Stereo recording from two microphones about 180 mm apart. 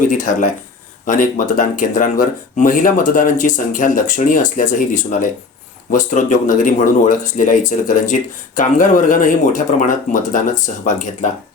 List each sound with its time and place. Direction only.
0.1 s speech: 45° left (ahead or behind)